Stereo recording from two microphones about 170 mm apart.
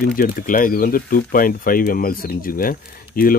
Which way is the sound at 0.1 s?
55° left (ahead or behind).